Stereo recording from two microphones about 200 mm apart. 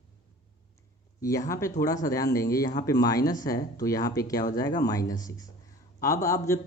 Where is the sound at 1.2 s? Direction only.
15° left (ahead or behind).